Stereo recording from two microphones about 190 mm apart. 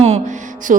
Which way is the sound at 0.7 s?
40° right (ahead or behind).